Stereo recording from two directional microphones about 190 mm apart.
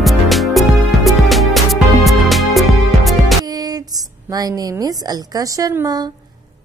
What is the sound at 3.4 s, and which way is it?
A woman's voice, 20° right (ahead or behind).